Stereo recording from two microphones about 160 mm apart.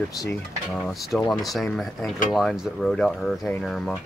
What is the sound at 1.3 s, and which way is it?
Speech, centre (ahead or behind).